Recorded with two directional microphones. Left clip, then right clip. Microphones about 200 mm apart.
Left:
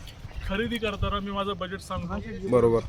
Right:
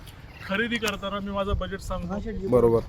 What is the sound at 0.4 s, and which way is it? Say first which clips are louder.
Speech: right 3 dB; 10° left (ahead or behind).